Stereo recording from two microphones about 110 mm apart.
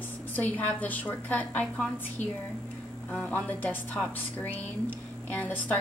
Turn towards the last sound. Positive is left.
turn(degrees=15)  # may be behind; listen again after turning